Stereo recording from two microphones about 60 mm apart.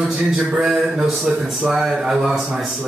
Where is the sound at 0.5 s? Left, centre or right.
Centre.